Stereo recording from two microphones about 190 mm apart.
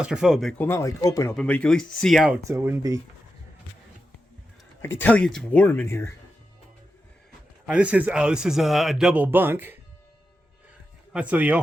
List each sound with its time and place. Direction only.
0.0 s speech: 5° right (ahead or behind)
0.7 s speech: 15° left (ahead or behind)
1.3 s speech: 5° left (ahead or behind)
2.5 s speech: 15° right (ahead or behind)
4.8 s speech: 10° left (ahead or behind)
7.7 s speech: 5° right (ahead or behind)
11.1 s speech: 5° right (ahead or behind)